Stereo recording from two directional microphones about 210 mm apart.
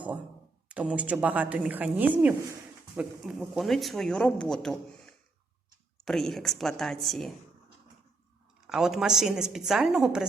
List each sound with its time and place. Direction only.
0.7 s a woman's voice: 5° right (ahead or behind)
8.6 s speech: centre (ahead or behind)